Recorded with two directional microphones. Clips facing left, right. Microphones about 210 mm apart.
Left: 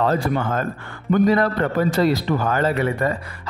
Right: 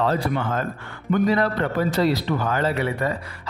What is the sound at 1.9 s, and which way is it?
Speech, 45° left (ahead or behind).